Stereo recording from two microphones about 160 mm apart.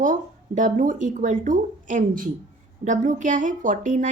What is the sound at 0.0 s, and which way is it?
A woman's voice, 50° right (ahead or behind).